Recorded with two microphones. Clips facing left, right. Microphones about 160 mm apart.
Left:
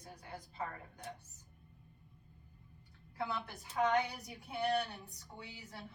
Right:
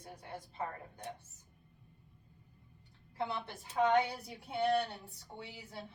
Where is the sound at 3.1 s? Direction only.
25° right (ahead or behind).